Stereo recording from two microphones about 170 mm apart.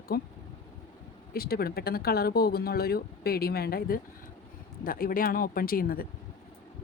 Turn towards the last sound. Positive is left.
turn(degrees=60)  # may be behind; listen again after turning